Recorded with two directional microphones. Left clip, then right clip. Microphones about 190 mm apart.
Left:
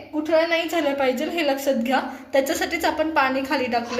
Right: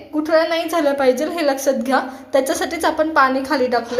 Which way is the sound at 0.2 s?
30° right (ahead or behind).